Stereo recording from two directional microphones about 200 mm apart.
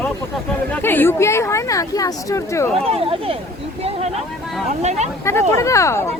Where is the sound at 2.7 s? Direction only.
30° right (ahead or behind).